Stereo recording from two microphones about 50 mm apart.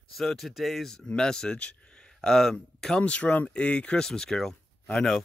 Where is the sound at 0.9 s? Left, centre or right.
Centre.